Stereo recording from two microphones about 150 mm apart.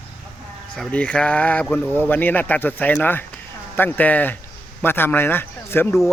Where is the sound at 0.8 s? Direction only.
10° left (ahead or behind).